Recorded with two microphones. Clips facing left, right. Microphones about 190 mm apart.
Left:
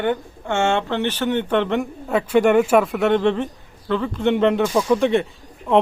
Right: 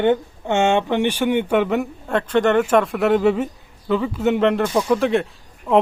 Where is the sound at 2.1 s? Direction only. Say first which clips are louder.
Left 2 dB; 10° left (ahead or behind).